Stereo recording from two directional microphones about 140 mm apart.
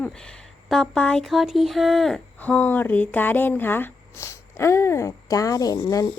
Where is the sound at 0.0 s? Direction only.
5° left (ahead or behind).